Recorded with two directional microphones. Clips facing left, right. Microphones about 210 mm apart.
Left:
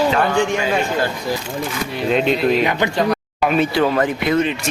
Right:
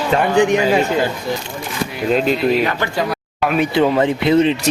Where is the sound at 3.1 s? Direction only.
5° right (ahead or behind).